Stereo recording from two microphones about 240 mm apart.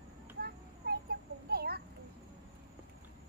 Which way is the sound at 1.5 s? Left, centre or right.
Right.